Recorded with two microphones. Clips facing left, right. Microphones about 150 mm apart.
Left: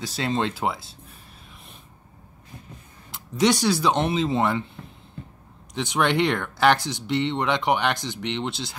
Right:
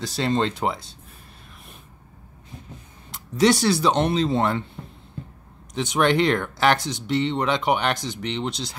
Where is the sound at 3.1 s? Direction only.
Centre (ahead or behind).